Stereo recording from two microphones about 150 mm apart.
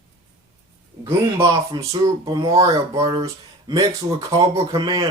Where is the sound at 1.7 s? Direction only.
25° right (ahead or behind).